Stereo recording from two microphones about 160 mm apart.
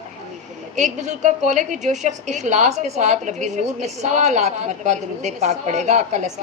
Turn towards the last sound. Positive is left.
turn(degrees=-45)  # may be behind; listen again after turning